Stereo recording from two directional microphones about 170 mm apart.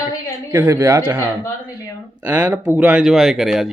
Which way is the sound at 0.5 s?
20° right (ahead or behind).